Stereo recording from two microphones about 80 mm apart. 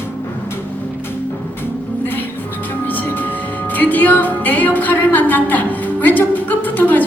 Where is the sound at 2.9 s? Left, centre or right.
Left.